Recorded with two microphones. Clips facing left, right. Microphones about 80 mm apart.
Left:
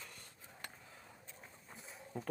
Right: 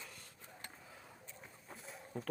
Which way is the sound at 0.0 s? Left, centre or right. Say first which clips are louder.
Right 1 dB; centre.